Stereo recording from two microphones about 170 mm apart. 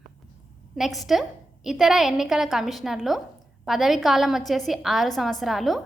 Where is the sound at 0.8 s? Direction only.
Centre (ahead or behind).